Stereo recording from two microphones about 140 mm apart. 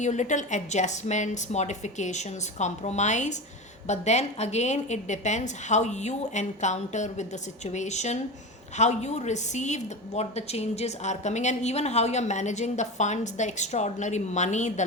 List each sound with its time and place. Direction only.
0.0 s a woman's voice: 60° left (ahead or behind)